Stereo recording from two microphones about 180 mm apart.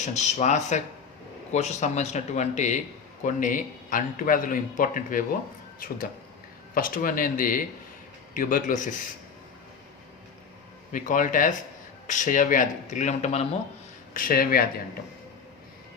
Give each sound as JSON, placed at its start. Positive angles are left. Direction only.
{"t": 0.0, "sound": "a man's voice", "side_deg": 40}
{"t": 6.7, "sound": "speech", "side_deg": 50}
{"t": 10.9, "sound": "speech", "side_deg": 45}
{"t": 14.1, "sound": "speech", "side_deg": 50}